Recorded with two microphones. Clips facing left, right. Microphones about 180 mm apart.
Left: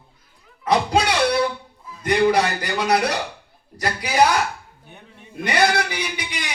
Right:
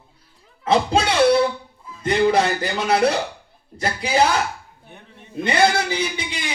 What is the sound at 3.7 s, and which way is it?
Speech, 25° right (ahead or behind).